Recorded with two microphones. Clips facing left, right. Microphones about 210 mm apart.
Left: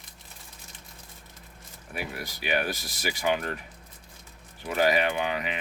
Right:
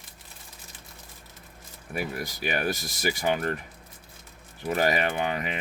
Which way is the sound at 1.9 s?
45° right (ahead or behind).